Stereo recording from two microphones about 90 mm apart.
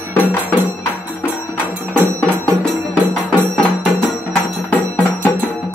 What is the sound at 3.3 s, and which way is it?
Music, 10° left (ahead or behind).